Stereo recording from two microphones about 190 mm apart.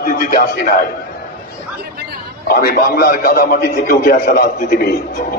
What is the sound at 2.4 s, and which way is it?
A man's voice, 55° left (ahead or behind).